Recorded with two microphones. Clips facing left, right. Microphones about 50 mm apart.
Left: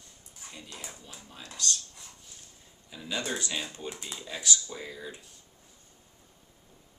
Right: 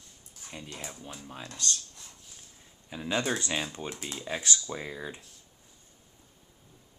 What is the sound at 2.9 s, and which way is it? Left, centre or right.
Speech, right.